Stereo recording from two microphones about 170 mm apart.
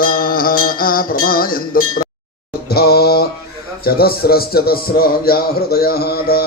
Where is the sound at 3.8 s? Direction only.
65° left (ahead or behind).